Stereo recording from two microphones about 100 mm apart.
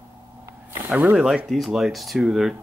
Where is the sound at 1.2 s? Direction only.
5° right (ahead or behind).